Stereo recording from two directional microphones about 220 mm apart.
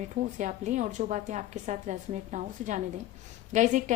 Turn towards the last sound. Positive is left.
turn(degrees=-35)  # may be behind; listen again after turning